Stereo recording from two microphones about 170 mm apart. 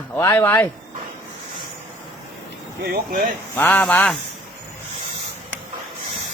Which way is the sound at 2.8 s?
60° right (ahead or behind).